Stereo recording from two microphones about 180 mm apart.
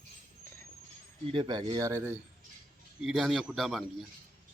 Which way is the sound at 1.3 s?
25° right (ahead or behind).